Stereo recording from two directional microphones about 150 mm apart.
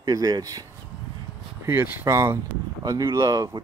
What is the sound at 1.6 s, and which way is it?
Speech, 15° right (ahead or behind).